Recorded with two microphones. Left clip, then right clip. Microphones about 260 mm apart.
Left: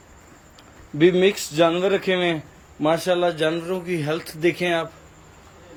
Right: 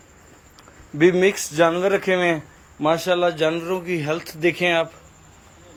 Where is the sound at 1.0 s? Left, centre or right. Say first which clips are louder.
Right 1 dB; centre.